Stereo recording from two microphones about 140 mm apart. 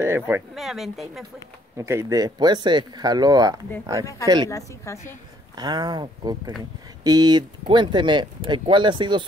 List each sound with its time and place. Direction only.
0.0 s speech: 15° right (ahead or behind)
0.6 s speech: centre (ahead or behind)
1.8 s speech: 20° right (ahead or behind)
4.5 s a woman's voice: 20° left (ahead or behind)
5.6 s speech: 30° right (ahead or behind)